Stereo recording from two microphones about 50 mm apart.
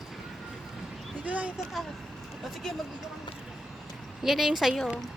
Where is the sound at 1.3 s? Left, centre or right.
Right.